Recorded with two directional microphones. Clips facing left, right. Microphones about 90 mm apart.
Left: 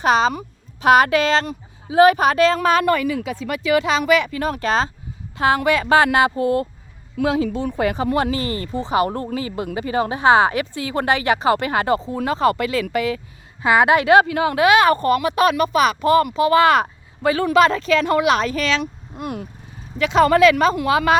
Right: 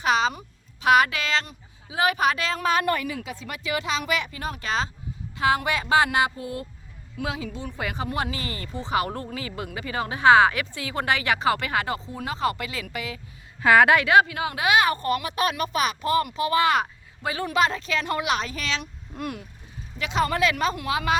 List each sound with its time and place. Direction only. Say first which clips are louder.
0.0 s a woman's voice: left 6 dB; 45° left (ahead or behind)
2.6 s a woman's voice: left 6 dB; 80° left; by 6.7 s 50° left (ahead or behind)
7.8 s speech: left 8 dB; 40° left (ahead or behind)
12.1 s a woman's voice: left 8 dB; 55° left (ahead or behind)
13.6 s a woman's voice: left 2 dB; 15° left (ahead or behind); by 16.7 s 85° left
17.2 s speech: left 8 dB; 65° left (ahead or behind)
20.0 s speech: left 10 dB; 60° left (ahead or behind)